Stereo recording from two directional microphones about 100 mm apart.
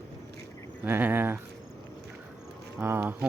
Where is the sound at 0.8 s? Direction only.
20° right (ahead or behind).